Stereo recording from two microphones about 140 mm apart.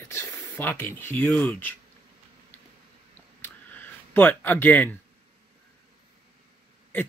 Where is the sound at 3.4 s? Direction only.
15° left (ahead or behind).